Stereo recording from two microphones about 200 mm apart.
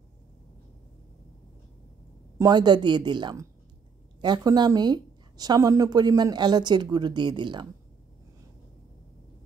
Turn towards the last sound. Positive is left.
turn(degrees=-25)  # may be behind; listen again after turning